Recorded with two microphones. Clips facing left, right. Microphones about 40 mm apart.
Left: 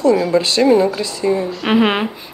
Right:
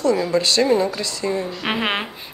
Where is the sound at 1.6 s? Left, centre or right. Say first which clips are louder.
Left 9 dB; centre.